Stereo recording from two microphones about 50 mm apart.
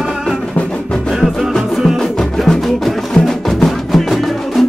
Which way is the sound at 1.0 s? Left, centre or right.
Centre.